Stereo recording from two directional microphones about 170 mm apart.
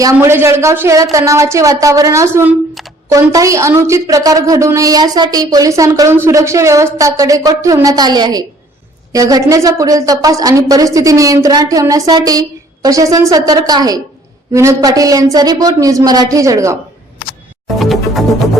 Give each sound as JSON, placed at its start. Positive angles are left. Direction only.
{"t": 0.0, "sound": "a woman's voice", "side_deg": -15}
{"t": 17.7, "sound": "music", "side_deg": 0}